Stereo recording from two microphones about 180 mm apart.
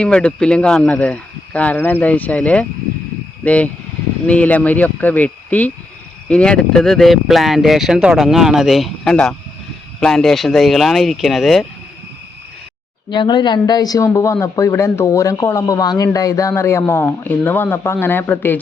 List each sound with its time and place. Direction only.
0.0 s speech: 5° left (ahead or behind)
13.1 s speech: 25° left (ahead or behind); by 18.6 s 10° left (ahead or behind)